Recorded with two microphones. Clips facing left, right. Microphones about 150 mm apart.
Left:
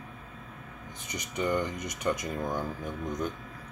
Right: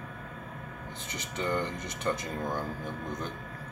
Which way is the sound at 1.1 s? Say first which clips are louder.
Left 2 dB; 15° left (ahead or behind).